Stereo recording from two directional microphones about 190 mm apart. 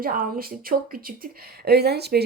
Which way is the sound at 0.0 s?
50° right (ahead or behind).